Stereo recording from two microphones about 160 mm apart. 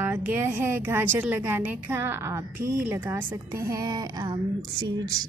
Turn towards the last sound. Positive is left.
turn(degrees=-25)  # may be behind; listen again after turning